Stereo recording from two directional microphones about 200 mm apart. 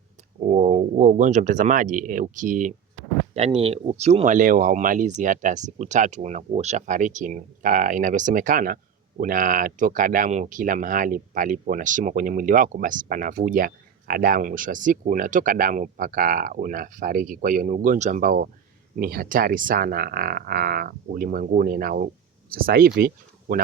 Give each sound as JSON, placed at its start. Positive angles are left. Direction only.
{"t": 0.3, "sound": "speech", "side_deg": -35}